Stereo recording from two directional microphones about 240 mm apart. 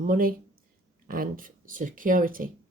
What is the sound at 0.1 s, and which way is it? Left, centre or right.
A woman's voice, right.